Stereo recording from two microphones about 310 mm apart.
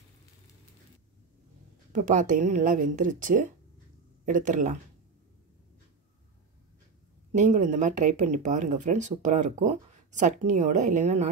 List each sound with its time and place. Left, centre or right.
1.9 s speech: right
7.3 s speech: right